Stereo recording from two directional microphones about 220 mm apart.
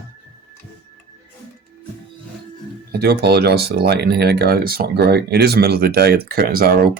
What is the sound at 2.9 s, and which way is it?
Speech, 50° right (ahead or behind).